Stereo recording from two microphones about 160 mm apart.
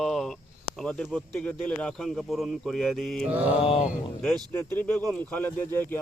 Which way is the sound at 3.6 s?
35° left (ahead or behind).